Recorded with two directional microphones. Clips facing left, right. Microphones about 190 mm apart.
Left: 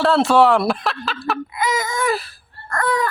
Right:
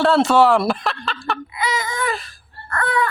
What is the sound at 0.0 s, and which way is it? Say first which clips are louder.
Speech: even; centre (ahead or behind).